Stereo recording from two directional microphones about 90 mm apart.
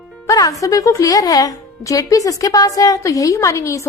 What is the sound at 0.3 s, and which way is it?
Music, 40° left (ahead or behind).